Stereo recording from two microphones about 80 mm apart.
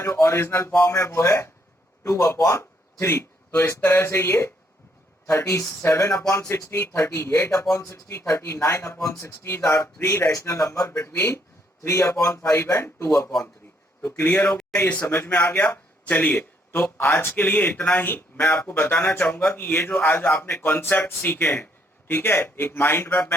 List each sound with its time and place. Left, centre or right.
0.0 s a man's voice: left